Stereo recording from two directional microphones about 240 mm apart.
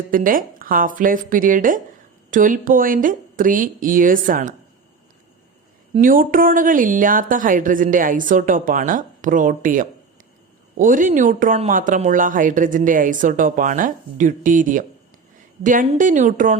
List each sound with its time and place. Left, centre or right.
0.1 s speech: right
5.9 s speech: right